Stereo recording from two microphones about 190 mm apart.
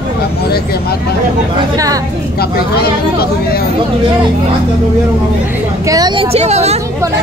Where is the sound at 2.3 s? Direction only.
55° left (ahead or behind).